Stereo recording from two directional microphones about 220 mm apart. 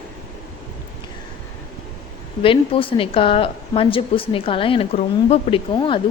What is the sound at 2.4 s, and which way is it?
A woman's voice, 25° left (ahead or behind).